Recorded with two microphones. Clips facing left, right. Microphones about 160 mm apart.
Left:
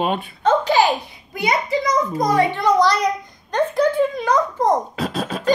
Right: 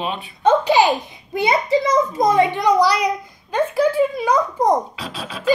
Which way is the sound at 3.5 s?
5° right (ahead or behind).